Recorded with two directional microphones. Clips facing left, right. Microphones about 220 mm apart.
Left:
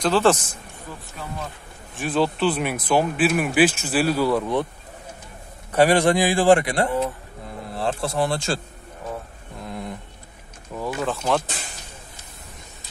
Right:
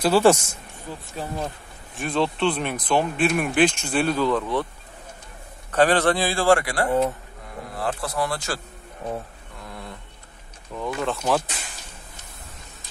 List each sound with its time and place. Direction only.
0.0 s speech: 10° right (ahead or behind)
0.9 s speech: 20° right (ahead or behind)
2.0 s speech: centre (ahead or behind)
5.7 s speech: 10° left (ahead or behind)
9.6 s a sound: 20° left (ahead or behind)
10.7 s speech: 5° left (ahead or behind)